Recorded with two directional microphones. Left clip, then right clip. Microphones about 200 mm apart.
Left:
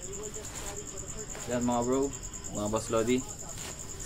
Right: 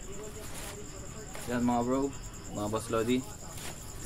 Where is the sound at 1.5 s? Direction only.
10° left (ahead or behind).